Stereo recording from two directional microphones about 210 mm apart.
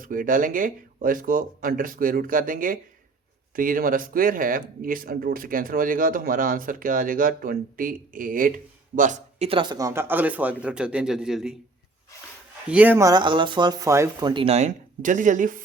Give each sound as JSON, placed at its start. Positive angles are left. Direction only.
{"t": 0.0, "sound": "speech", "side_deg": -40}
{"t": 12.6, "sound": "speech", "side_deg": -5}